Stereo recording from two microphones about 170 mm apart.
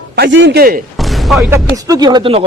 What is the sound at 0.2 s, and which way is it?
Speech, 90° right.